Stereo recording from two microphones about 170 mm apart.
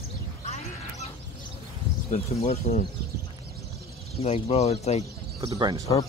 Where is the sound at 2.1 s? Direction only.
35° left (ahead or behind).